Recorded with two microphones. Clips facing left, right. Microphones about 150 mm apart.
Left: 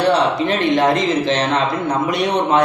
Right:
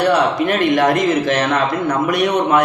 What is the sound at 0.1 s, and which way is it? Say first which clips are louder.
A man's voice: right 1 dB; 25° left (ahead or behind).